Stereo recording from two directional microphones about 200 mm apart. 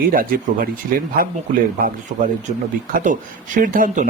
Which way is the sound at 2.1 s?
40° right (ahead or behind).